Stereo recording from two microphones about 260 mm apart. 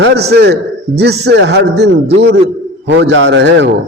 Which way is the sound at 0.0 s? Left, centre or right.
Right.